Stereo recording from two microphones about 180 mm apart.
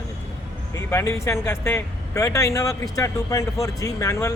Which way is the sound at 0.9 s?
15° left (ahead or behind).